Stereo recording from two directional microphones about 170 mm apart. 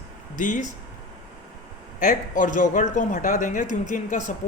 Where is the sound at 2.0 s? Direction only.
50° left (ahead or behind).